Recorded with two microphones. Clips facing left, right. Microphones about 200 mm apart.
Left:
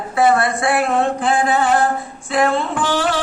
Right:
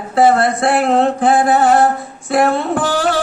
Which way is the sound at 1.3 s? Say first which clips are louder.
Right 4 dB; 40° right (ahead or behind).